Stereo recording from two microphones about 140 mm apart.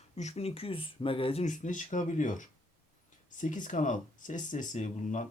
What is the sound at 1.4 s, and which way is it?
Speech, 60° left (ahead or behind).